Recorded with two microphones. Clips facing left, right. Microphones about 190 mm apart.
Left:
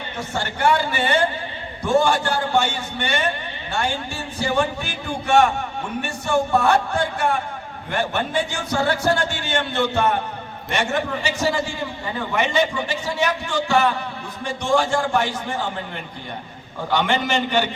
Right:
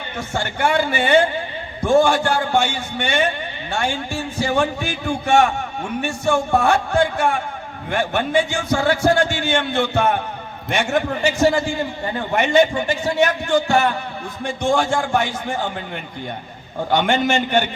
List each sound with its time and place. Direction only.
0.2 s a man's voice: 50° right (ahead or behind)
4.4 s a man's voice: 50° right (ahead or behind)
16.9 s a man's voice: 55° right (ahead or behind)